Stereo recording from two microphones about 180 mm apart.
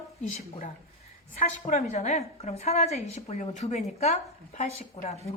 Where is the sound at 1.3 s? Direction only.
40° left (ahead or behind).